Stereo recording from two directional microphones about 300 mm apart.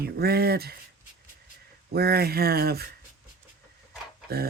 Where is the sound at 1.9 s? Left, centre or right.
Right.